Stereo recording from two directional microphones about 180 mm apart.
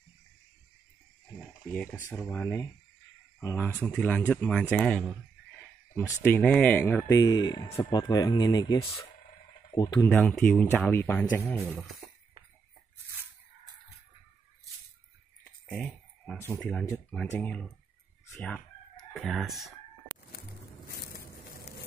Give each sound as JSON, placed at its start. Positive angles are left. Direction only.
{"t": 1.7, "sound": "speech", "side_deg": 5}
{"t": 5.6, "sound": "a sound", "side_deg": 10}
{"t": 6.2, "sound": "speech", "side_deg": 10}
{"t": 10.0, "sound": "speech", "side_deg": 5}
{"t": 15.6, "sound": "clicking", "side_deg": 5}
{"t": 16.5, "sound": "speech", "side_deg": 0}